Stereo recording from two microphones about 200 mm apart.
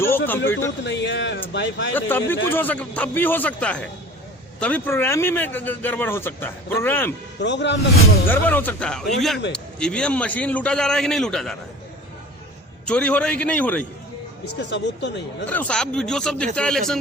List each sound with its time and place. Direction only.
0.3 s speech: 10° left (ahead or behind)
0.9 s speech: 60° left (ahead or behind)
2.0 s speech: 10° left (ahead or behind)
7.4 s speech: 60° left (ahead or behind)
8.3 s a man's voice: 10° left (ahead or behind)
12.8 s speech: 5° left (ahead or behind)
14.7 s speech: 65° left (ahead or behind)
15.4 s a man's voice: 5° left (ahead or behind)